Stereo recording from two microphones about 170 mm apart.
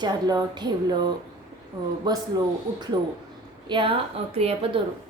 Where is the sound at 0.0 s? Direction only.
25° right (ahead or behind).